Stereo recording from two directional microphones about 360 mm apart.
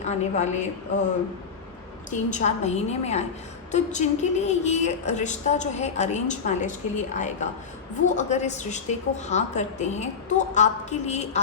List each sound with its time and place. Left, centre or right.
0.0 s a woman's voice: centre
2.0 s a woman's voice: centre